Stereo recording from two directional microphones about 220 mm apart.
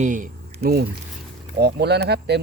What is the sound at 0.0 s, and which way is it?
Speech, 35° right (ahead or behind).